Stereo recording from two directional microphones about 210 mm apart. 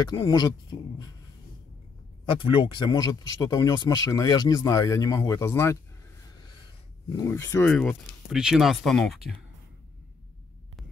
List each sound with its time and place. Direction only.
0.0 s speech: 20° left (ahead or behind)
2.2 s speech: 25° left (ahead or behind)
7.1 s speech: 15° left (ahead or behind); by 9.4 s centre (ahead or behind)